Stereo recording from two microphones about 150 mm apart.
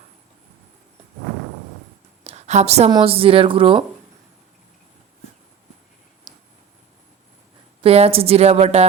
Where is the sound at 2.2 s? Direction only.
45° right (ahead or behind).